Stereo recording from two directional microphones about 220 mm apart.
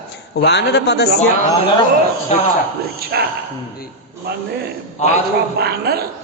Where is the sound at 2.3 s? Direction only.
30° left (ahead or behind).